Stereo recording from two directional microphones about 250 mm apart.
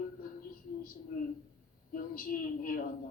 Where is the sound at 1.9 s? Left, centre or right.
Left.